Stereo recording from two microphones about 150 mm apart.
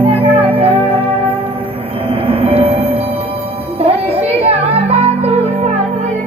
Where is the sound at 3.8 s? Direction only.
40° right (ahead or behind).